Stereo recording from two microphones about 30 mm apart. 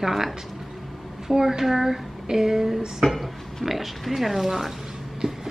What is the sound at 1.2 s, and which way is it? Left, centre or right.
Speech, centre.